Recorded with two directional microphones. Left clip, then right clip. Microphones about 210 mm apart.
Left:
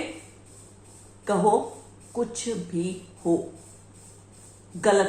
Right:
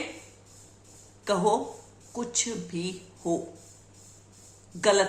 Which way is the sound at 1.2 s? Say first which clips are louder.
Left 3 dB; 10° right (ahead or behind).